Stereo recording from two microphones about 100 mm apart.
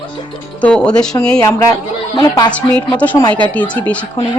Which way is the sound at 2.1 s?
45° left (ahead or behind).